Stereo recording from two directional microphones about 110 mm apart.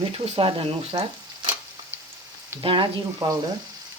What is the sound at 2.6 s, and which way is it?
Frying, 45° right (ahead or behind).